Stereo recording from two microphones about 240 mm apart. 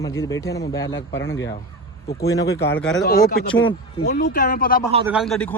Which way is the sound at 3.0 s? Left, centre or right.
Left.